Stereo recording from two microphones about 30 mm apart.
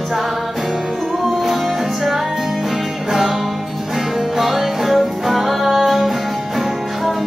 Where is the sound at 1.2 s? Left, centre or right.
Centre.